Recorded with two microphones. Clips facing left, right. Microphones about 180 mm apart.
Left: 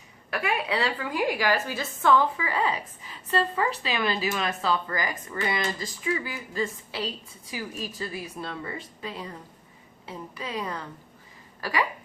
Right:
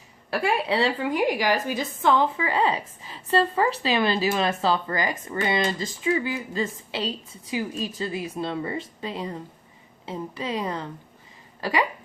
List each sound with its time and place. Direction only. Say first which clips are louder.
0.3 s a woman's voice: right 4 dB; 30° right (ahead or behind)